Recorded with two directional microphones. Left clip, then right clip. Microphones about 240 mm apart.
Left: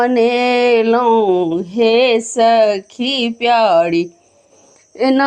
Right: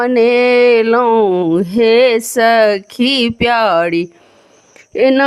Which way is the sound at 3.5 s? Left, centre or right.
Right.